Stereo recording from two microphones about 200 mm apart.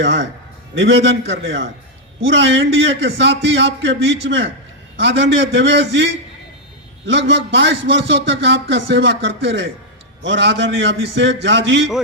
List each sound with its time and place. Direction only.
0.0 s a man's voice: 65° right (ahead or behind)